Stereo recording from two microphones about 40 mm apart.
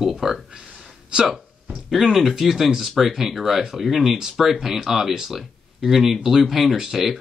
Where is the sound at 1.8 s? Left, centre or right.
Centre.